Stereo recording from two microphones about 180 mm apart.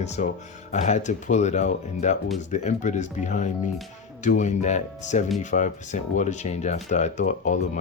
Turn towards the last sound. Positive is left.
turn(degrees=40)  # may be behind; listen again after turning